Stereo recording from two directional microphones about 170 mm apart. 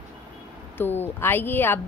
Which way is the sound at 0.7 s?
10° left (ahead or behind).